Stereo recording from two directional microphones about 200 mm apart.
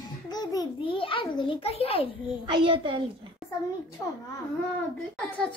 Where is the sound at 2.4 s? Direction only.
25° right (ahead or behind).